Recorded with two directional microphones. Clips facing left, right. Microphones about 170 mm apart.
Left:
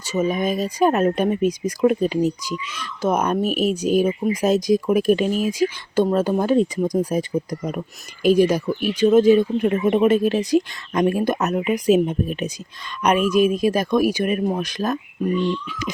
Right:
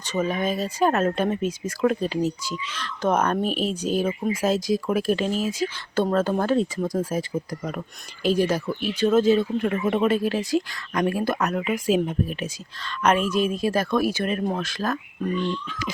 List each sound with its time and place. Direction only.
0.0 s speech: 10° left (ahead or behind)